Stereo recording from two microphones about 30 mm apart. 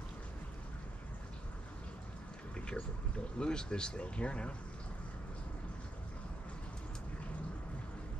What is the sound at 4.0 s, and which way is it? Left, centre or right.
Speech, left.